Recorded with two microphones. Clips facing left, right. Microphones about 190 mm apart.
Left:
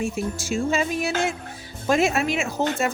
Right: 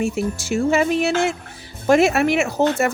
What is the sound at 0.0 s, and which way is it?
Speech, 65° right (ahead or behind).